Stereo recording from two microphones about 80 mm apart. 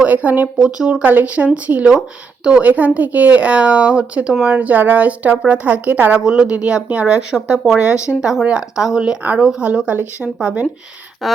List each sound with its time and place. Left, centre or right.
0.0 s speech: centre
6.1 s speech: centre